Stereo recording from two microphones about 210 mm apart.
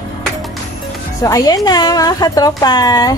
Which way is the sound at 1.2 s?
15° left (ahead or behind).